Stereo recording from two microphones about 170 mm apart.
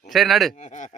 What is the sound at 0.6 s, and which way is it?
Speech, 45° left (ahead or behind).